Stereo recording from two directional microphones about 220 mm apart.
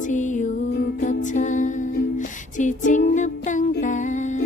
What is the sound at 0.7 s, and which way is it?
Music, 45° left (ahead or behind).